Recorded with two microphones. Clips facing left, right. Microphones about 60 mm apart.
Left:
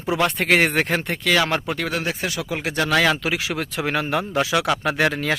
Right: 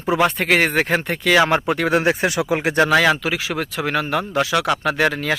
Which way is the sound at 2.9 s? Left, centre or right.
Centre.